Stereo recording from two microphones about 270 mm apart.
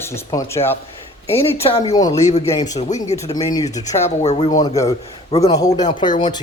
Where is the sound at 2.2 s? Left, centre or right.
Left.